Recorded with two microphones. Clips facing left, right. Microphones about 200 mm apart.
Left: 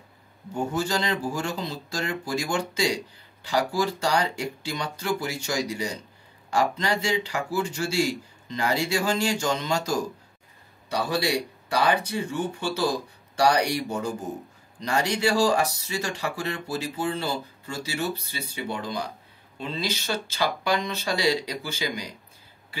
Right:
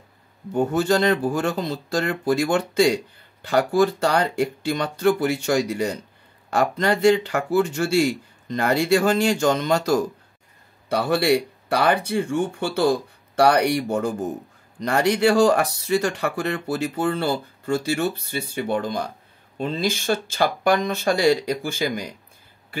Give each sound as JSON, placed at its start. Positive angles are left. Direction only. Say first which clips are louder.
{"t": 0.5, "sound": "speech", "louder": "right 7 dB", "side_deg": -60}